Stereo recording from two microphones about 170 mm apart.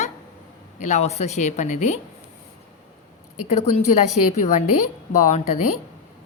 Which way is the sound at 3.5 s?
40° left (ahead or behind).